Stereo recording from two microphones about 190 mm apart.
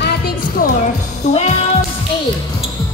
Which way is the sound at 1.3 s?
35° left (ahead or behind).